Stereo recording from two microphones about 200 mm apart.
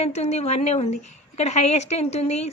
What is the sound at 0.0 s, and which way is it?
A woman's voice, 35° left (ahead or behind).